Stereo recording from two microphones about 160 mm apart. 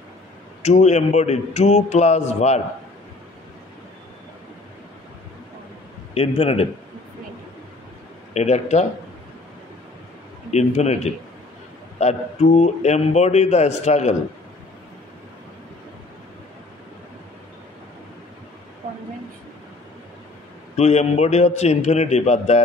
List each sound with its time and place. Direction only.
0.6 s a man's voice: 45° left (ahead or behind)
6.1 s a man's voice: 40° left (ahead or behind)
8.3 s a man's voice: 45° left (ahead or behind)
10.5 s a man's voice: 45° left (ahead or behind)
20.7 s a man's voice: 45° left (ahead or behind)